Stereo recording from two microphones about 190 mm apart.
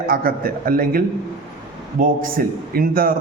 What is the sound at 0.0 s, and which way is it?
A man's voice, 50° right (ahead or behind).